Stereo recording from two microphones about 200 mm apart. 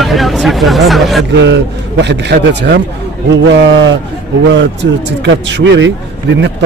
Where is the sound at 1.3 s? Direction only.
60° right (ahead or behind).